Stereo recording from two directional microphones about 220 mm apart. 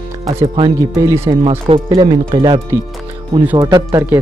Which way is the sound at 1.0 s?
10° right (ahead or behind).